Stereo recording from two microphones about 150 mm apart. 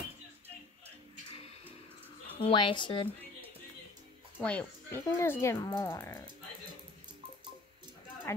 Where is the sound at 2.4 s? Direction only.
35° left (ahead or behind).